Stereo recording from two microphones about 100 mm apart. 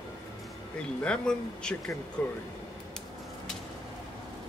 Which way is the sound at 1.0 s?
10° left (ahead or behind).